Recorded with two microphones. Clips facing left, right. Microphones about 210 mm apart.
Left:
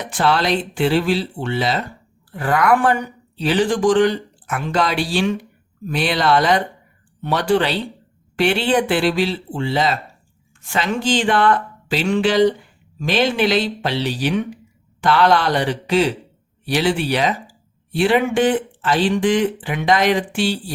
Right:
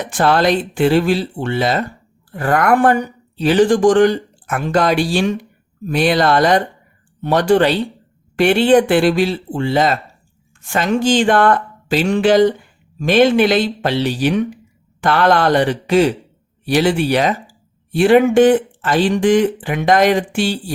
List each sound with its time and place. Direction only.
0.1 s a woman's voice: 50° right (ahead or behind)